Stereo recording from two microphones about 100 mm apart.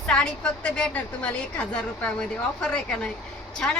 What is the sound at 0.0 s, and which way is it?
A woman's voice, 10° left (ahead or behind).